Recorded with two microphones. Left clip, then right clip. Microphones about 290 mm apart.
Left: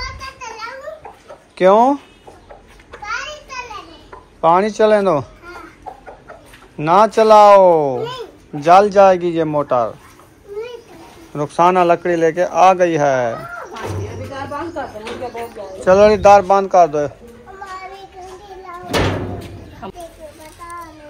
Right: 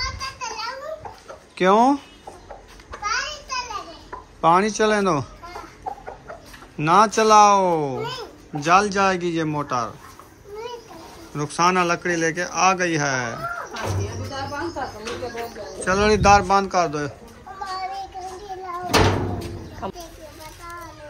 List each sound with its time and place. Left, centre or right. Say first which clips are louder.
1.6 s a man's voice: left 5 dB; centre
2.9 s a sound: right 3 dB; right
4.4 s a man's voice: left 5 dB; centre
6.8 s a man's voice: left 5 dB; centre
11.3 s a man's voice: left 6 dB; centre
15.8 s a man's voice: left 9 dB; centre
19.8 s a sound: right 1 dB; right